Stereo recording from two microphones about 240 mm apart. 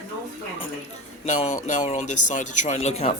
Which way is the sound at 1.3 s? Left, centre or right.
Left.